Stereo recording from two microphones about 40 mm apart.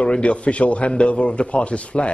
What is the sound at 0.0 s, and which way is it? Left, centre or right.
Speech, left.